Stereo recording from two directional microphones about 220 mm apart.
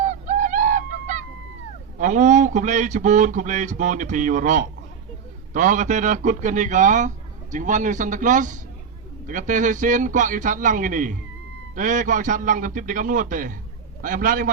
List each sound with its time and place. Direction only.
0.0 s bird: 35° right (ahead or behind)
2.0 s speech: 35° right (ahead or behind)